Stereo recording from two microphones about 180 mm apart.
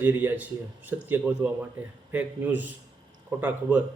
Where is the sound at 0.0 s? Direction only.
10° right (ahead or behind).